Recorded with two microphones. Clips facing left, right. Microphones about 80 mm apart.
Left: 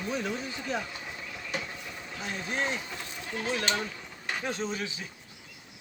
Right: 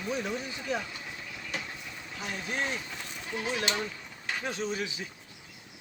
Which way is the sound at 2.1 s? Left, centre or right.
Left.